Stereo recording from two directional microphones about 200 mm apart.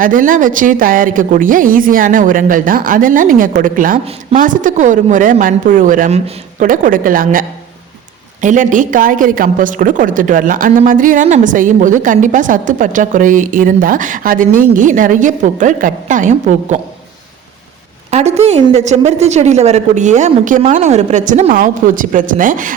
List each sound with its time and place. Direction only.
0.0 s a woman's voice: 40° right (ahead or behind)
18.1 s a woman's voice: 35° right (ahead or behind)